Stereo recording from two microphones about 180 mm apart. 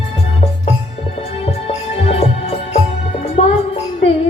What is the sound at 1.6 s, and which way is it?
Music, 35° left (ahead or behind).